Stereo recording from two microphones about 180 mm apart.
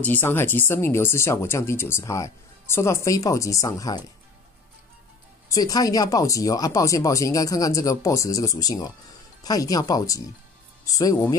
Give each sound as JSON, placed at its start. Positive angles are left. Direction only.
{"t": 0.0, "sound": "speech", "side_deg": 10}
{"t": 5.5, "sound": "speech", "side_deg": 20}